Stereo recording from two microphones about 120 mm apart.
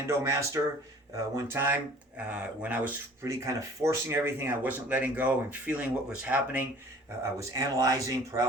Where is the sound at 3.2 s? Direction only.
25° right (ahead or behind).